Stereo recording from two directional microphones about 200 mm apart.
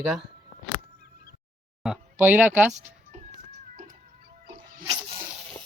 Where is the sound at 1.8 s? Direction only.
5° right (ahead or behind).